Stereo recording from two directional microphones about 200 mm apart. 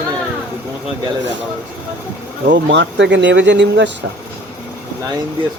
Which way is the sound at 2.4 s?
60° right (ahead or behind).